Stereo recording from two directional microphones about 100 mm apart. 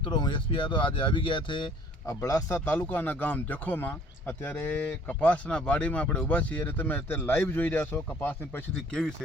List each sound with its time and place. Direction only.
0.0 s speech: 50° left (ahead or behind)
2.0 s a man's voice: 30° left (ahead or behind)
2.6 s a man's voice: 20° left (ahead or behind)